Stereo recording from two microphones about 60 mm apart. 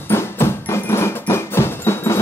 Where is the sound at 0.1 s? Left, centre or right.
Left.